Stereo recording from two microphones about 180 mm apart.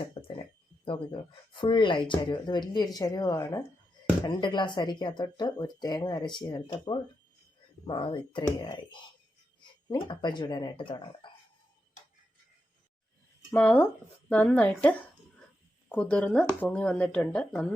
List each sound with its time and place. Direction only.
0.0 s a sound: 30° left (ahead or behind)
0.9 s speech: 30° left (ahead or behind)
13.5 s speech: 10° left (ahead or behind)